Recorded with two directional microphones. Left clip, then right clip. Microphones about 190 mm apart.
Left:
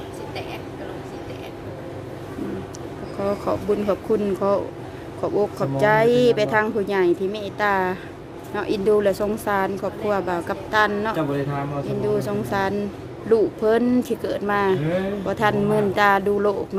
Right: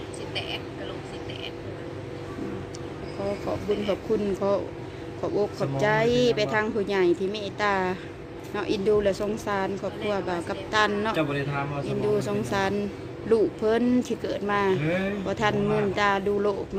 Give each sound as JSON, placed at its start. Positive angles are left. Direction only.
{"t": 4.4, "sound": "speech", "side_deg": 10}